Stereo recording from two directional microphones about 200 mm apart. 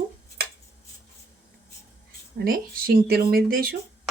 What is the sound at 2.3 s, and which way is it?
Speech, 45° right (ahead or behind).